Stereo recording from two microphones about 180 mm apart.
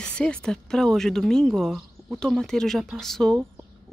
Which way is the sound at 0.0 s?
5° left (ahead or behind).